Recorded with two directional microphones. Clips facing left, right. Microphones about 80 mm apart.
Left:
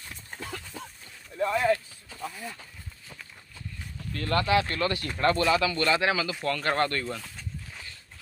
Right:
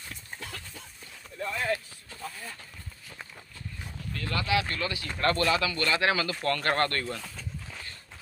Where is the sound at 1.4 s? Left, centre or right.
Left.